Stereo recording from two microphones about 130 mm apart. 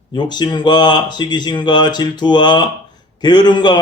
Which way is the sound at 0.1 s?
35° left (ahead or behind).